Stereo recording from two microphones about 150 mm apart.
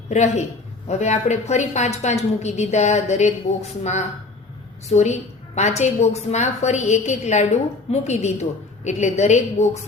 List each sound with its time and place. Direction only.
0.1 s a woman's voice: 50° left (ahead or behind)